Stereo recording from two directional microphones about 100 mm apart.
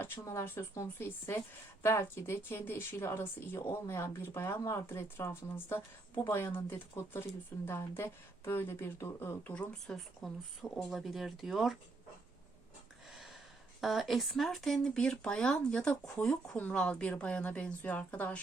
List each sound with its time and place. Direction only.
0.0 s speech: 25° left (ahead or behind)
9.5 s speech: 10° left (ahead or behind)
13.1 s a sound: 5° right (ahead or behind)
13.8 s speech: centre (ahead or behind); by 18.3 s 15° left (ahead or behind)